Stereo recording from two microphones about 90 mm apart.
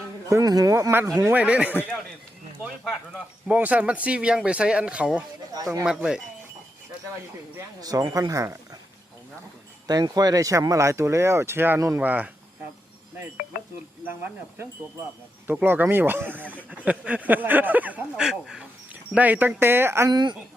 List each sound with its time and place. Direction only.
0.3 s speech: 40° right (ahead or behind)
1.3 s speech: 15° right (ahead or behind)
3.4 s speech: 15° right (ahead or behind)
7.8 s speech: 45° right (ahead or behind)
9.8 s speech: 45° right (ahead or behind); by 12.3 s 20° right (ahead or behind)
14.1 s speech: 25° right (ahead or behind)
18.2 s speech: 5° right (ahead or behind)
19.1 s speech: 20° right (ahead or behind)
20.1 s speech: 50° right (ahead or behind)